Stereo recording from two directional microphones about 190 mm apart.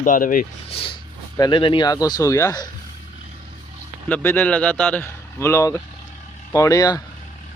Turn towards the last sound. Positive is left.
turn(degrees=20)  # may be behind; listen again after turning